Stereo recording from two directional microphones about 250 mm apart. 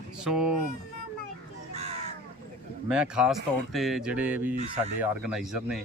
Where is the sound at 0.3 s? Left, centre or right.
Centre.